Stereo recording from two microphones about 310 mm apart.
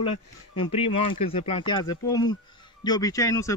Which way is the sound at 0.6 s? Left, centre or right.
Centre.